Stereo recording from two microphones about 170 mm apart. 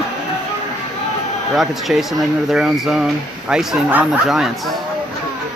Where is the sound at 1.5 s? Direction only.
Centre (ahead or behind).